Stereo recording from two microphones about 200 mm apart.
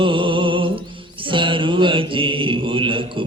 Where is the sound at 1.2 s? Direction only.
25° right (ahead or behind).